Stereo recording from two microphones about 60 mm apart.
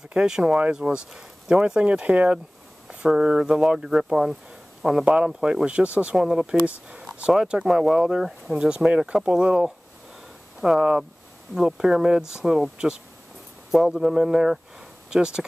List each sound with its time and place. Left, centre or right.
0.1 s speech: centre
2.9 s speech: centre
5.0 s speech: centre
8.6 s speech: centre
12.7 s speech: centre